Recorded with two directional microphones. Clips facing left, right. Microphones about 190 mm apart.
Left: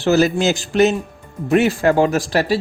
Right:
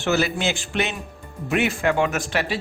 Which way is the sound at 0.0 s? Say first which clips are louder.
Left 7 dB; 40° left (ahead or behind).